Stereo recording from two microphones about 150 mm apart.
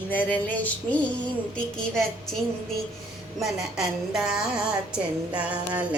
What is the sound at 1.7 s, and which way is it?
Speech, 5° left (ahead or behind).